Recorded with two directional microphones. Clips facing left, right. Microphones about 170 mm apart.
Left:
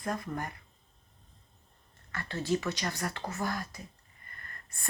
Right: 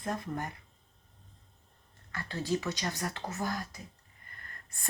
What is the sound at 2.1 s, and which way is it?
Speech, 15° right (ahead or behind).